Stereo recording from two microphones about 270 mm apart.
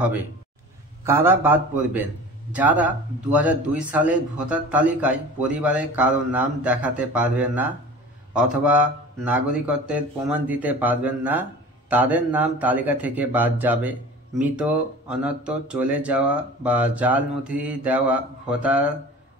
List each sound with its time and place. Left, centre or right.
1.0 s a man's voice: centre